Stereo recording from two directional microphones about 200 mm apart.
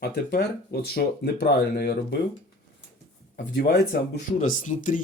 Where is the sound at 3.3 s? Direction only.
55° left (ahead or behind).